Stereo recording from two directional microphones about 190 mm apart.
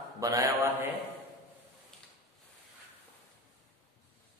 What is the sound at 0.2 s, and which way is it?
Speech, 15° right (ahead or behind).